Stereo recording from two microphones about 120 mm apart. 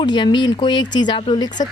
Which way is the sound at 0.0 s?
40° left (ahead or behind).